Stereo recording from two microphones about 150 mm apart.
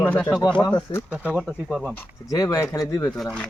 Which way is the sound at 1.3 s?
Centre (ahead or behind).